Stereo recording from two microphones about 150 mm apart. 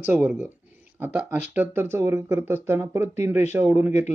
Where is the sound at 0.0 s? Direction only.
10° right (ahead or behind).